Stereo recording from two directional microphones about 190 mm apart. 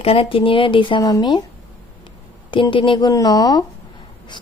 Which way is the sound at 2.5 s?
25° left (ahead or behind).